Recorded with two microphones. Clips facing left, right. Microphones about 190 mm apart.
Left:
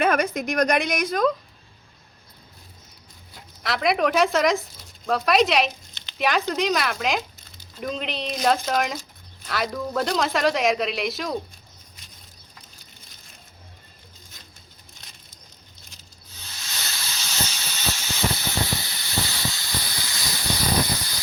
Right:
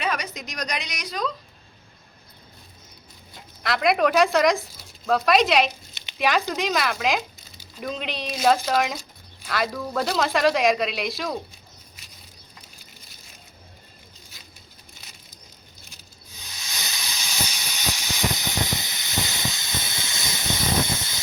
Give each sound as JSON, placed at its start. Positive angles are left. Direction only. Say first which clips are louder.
{"t": 0.0, "sound": "a woman's voice", "louder": "left 7 dB", "side_deg": 50}
{"t": 3.6, "sound": "speech", "louder": "right 1 dB", "side_deg": 0}
{"t": 16.3, "sound": "hiss", "louder": "even", "side_deg": -15}